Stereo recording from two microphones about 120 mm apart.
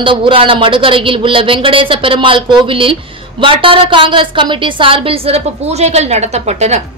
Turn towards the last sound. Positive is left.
turn(degrees=-65)  # may be behind; listen again after turning